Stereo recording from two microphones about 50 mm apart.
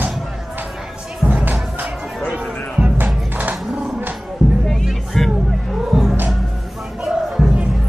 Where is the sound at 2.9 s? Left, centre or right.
Right.